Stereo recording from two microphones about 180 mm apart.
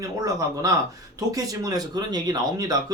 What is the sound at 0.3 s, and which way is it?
Speech, 20° right (ahead or behind).